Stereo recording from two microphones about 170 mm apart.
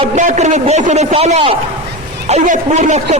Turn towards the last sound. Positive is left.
turn(degrees=-40)  # may be behind; listen again after turning